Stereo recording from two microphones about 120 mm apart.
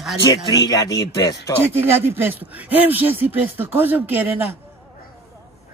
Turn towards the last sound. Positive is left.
turn(degrees=-15)  # may be behind; listen again after turning